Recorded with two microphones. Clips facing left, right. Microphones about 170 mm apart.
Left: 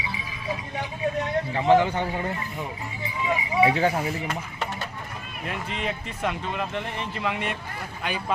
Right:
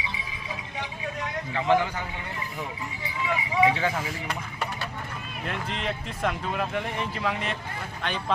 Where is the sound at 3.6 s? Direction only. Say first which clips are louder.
Left 3 dB; 35° left (ahead or behind).